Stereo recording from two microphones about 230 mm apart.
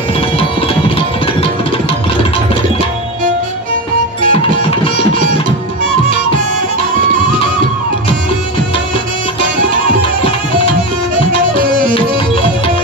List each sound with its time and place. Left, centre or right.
0.4 s music: left
4.2 s music: left
11.5 s music: right